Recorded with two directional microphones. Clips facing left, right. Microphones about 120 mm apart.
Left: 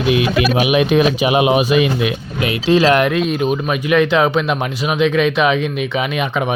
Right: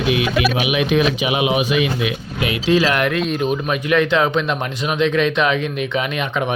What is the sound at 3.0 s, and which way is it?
Speech, 15° left (ahead or behind).